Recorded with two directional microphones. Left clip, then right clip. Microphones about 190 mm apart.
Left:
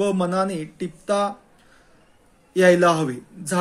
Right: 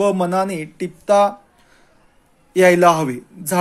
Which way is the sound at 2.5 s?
35° right (ahead or behind).